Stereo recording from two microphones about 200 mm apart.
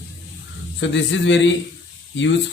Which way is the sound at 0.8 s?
65° left (ahead or behind).